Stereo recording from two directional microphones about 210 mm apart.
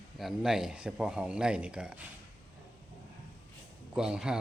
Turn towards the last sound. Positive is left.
turn(degrees=-5)  # may be behind; listen again after turning